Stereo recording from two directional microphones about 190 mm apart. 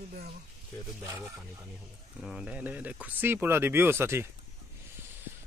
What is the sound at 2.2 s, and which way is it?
Speech, 5° right (ahead or behind).